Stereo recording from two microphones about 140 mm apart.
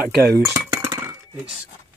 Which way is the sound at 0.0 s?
15° right (ahead or behind).